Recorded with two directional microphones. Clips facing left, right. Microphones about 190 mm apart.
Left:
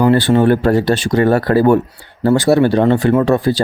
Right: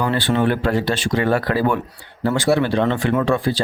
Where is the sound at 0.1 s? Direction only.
45° left (ahead or behind).